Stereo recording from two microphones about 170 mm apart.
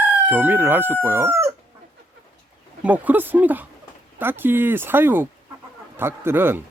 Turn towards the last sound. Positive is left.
turn(degrees=-10)  # may be behind; listen again after turning